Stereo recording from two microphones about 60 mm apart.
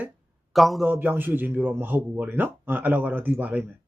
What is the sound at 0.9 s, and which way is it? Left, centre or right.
Speech, right.